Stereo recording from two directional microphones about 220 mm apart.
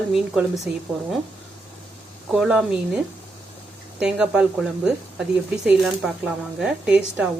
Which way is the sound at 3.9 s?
5° right (ahead or behind).